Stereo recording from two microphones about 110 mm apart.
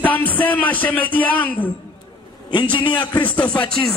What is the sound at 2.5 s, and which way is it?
Music, 45° left (ahead or behind).